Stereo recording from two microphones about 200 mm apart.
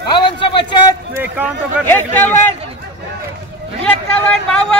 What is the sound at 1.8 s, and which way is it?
Speech, 10° left (ahead or behind).